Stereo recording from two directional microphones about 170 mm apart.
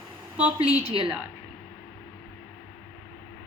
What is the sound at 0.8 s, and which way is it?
Speech, 35° right (ahead or behind).